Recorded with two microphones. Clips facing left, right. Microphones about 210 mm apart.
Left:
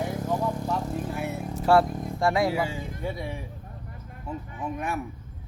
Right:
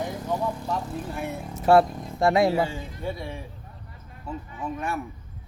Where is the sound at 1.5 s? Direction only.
20° right (ahead or behind).